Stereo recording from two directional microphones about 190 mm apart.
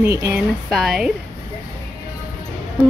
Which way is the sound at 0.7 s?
Centre (ahead or behind).